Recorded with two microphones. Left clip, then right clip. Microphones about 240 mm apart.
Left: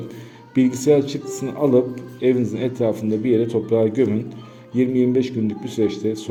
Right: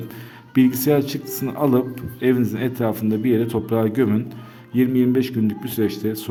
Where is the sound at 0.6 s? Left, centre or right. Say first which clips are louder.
Left 1 dB; right.